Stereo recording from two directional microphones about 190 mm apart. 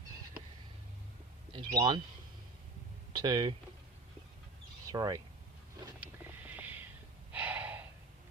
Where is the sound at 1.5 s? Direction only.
25° right (ahead or behind).